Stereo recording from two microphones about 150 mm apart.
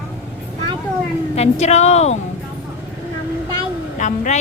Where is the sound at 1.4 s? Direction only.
50° left (ahead or behind).